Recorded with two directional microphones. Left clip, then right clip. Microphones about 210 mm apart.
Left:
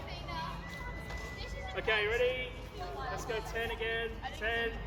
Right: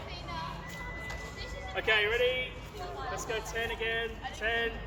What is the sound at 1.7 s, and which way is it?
Speech, 10° right (ahead or behind).